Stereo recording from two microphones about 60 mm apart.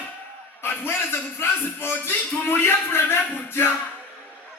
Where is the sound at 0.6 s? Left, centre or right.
Left.